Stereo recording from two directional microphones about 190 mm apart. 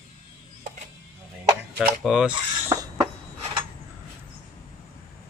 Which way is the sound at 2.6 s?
15° right (ahead or behind).